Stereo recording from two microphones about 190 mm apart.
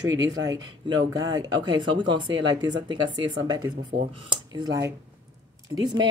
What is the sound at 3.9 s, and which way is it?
Speech, 60° right (ahead or behind).